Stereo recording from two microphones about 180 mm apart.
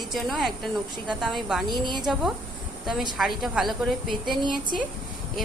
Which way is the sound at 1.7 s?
25° right (ahead or behind).